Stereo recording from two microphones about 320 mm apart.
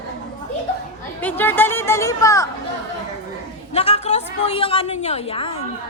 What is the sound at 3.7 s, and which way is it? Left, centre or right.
A woman's voice, centre.